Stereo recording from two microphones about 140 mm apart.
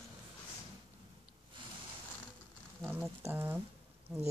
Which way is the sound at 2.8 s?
15° right (ahead or behind).